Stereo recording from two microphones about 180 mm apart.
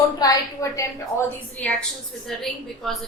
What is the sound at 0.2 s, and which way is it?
Speech, 20° left (ahead or behind).